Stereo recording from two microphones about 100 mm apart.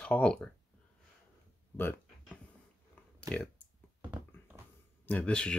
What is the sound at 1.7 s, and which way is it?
Speech, 20° left (ahead or behind).